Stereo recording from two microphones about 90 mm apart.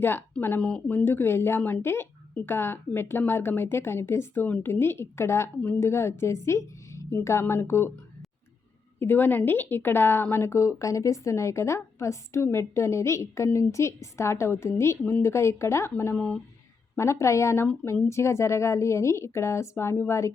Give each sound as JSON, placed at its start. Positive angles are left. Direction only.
{"t": 0.0, "sound": "a woman's voice", "side_deg": 25}
{"t": 9.0, "sound": "a woman's voice", "side_deg": 25}
{"t": 16.1, "sound": "speech", "side_deg": 10}
{"t": 16.9, "sound": "a woman's voice", "side_deg": 30}